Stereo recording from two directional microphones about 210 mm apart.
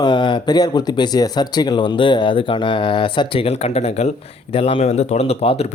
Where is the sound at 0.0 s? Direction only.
20° left (ahead or behind).